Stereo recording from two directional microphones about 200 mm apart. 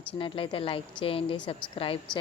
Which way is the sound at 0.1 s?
25° left (ahead or behind).